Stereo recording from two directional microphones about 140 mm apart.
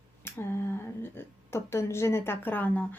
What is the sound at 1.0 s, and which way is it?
A woman's voice, 15° left (ahead or behind).